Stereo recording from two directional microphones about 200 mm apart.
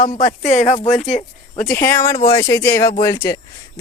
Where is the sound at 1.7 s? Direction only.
10° left (ahead or behind).